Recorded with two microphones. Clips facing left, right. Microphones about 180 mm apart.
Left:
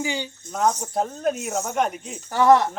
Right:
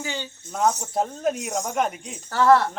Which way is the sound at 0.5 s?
5° right (ahead or behind).